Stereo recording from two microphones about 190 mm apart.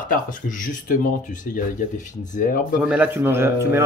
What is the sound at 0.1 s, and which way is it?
Speech, 45° left (ahead or behind).